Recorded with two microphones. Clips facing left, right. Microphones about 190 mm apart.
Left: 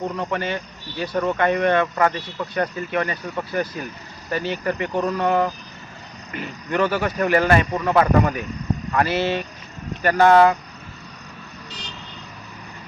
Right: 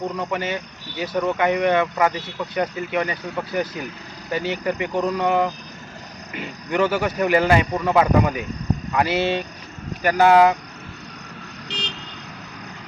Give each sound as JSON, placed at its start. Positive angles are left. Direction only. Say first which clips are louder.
{"t": 0.2, "sound": "speech", "louder": "even", "side_deg": -10}
{"t": 11.7, "sound": "vehicle", "louder": "right 8 dB", "side_deg": -70}